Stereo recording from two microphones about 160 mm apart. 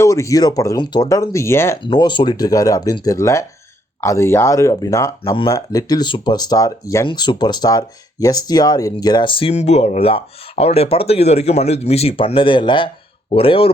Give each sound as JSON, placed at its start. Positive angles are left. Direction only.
{"t": 0.0, "sound": "speech", "side_deg": 20}
{"t": 1.8, "sound": "speech", "side_deg": 30}